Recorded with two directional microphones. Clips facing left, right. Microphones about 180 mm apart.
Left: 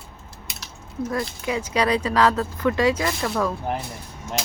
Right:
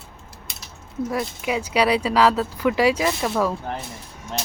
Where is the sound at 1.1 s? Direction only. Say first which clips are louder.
Right 1 dB; 15° right (ahead or behind).